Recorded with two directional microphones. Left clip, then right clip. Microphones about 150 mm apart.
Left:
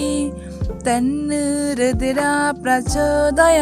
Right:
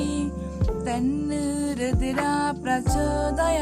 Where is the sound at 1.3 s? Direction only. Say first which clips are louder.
Left 7 dB; 45° left (ahead or behind).